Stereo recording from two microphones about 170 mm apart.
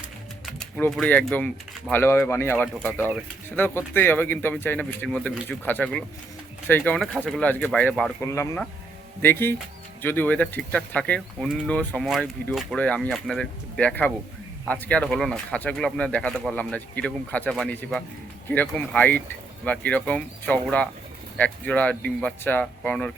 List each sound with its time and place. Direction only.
0.4 s speech: centre (ahead or behind)